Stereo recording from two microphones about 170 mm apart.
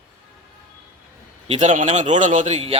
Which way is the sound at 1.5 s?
45° right (ahead or behind).